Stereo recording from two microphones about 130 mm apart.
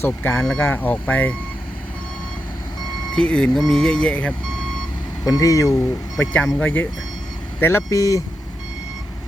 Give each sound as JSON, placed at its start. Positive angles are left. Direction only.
{"t": 0.0, "sound": "speech", "side_deg": 15}
{"t": 3.2, "sound": "speech", "side_deg": 5}
{"t": 5.2, "sound": "speech", "side_deg": 25}
{"t": 6.4, "sound": "speech", "side_deg": 5}
{"t": 7.6, "sound": "speech", "side_deg": 20}